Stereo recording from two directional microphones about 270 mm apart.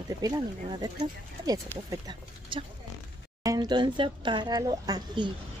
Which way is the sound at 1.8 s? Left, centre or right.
Centre.